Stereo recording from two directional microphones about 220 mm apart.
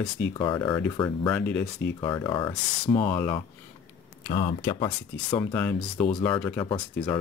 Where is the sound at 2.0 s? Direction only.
20° left (ahead or behind).